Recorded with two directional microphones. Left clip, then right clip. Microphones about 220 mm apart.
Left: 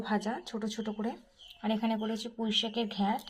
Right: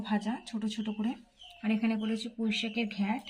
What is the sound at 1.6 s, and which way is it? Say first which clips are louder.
Speech: left 1 dB; 25° left (ahead or behind).